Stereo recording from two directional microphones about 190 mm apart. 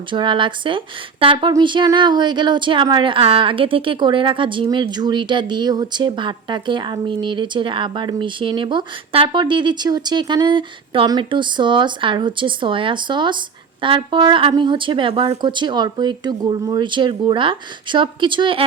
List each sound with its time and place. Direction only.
0.1 s a woman's voice: 25° right (ahead or behind)